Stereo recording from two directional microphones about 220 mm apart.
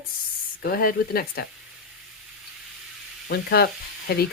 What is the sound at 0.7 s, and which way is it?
Speech, 40° left (ahead or behind).